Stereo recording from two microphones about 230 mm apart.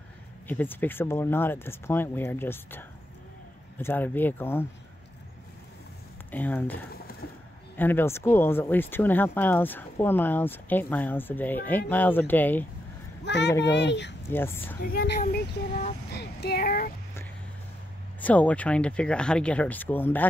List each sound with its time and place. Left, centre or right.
0.5 s speech: centre
6.3 s speech: centre
13.2 s a child's voice: left
14.3 s speech: centre
14.8 s a woman's voice: left
18.2 s speech: centre